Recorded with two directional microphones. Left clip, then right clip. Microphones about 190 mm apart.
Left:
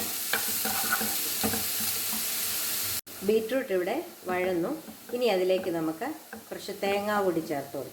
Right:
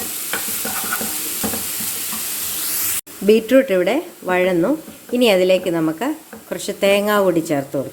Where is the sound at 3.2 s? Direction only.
60° right (ahead or behind).